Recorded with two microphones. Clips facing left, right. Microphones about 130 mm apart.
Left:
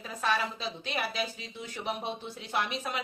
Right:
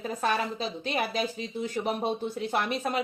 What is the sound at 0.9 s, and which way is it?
Speech, 45° right (ahead or behind).